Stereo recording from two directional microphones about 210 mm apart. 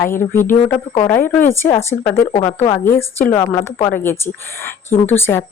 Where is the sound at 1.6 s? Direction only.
10° left (ahead or behind).